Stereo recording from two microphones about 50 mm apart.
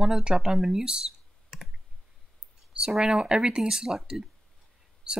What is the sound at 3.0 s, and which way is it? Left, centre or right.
Speech, centre.